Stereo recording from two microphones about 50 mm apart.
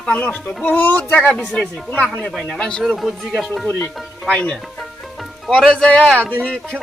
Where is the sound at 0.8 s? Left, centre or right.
Left.